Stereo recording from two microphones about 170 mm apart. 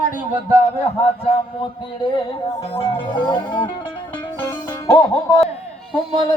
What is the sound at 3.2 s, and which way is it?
Music, 25° left (ahead or behind).